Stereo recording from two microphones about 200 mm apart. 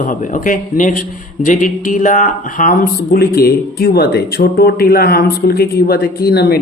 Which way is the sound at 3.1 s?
50° left (ahead or behind).